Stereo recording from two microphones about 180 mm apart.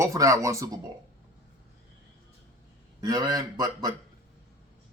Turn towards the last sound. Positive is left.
turn(degrees=-20)  # may be behind; listen again after turning